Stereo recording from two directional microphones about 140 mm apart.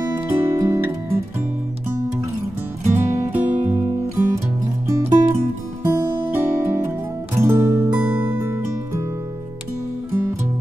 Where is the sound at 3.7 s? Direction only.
15° right (ahead or behind).